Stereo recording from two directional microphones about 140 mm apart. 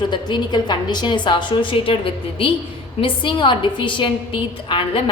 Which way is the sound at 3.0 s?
35° left (ahead or behind).